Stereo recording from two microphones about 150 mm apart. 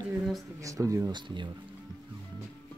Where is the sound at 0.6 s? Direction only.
20° right (ahead or behind).